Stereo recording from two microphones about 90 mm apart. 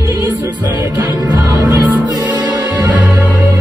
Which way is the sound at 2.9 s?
15° right (ahead or behind).